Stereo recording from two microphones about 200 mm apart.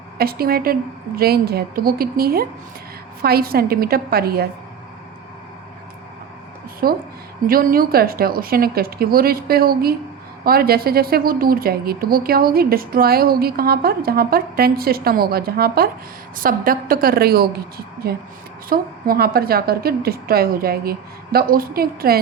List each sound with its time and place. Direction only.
0.2 s a woman's voice: 50° right (ahead or behind)
6.8 s a woman's voice: 45° right (ahead or behind)